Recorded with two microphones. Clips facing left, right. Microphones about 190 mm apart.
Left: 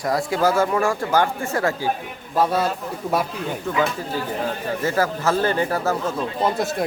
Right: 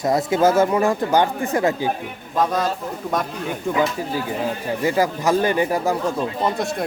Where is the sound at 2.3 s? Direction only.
10° left (ahead or behind).